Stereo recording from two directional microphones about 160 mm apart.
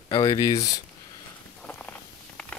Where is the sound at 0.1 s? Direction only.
25° left (ahead or behind).